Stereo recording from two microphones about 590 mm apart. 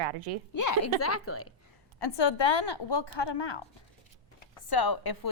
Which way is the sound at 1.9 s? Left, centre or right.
Left.